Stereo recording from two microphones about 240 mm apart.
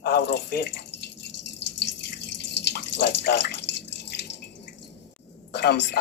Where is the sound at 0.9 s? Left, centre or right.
Left.